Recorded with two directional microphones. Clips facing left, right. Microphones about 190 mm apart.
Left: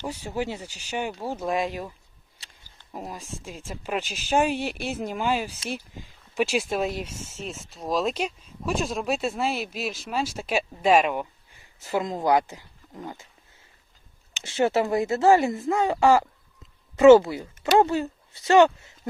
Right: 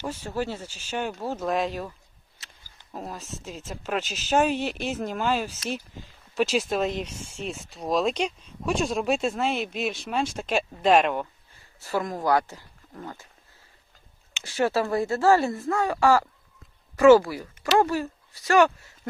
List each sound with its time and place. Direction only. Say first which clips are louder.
0.0 s speech: even; 15° left (ahead or behind)
3.1 s speech: even; 10° left (ahead or behind)
11.8 s speech: left 1 dB; 20° left (ahead or behind)
14.4 s speech: left 2 dB; 20° left (ahead or behind)